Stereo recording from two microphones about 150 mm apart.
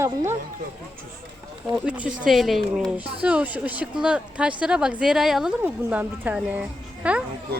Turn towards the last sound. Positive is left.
turn(degrees=-10)  # may be behind; listen again after turning